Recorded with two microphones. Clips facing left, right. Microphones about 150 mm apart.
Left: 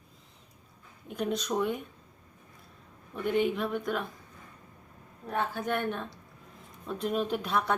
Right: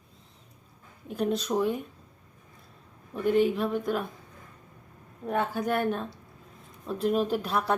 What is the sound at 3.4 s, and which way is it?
Speech, centre (ahead or behind).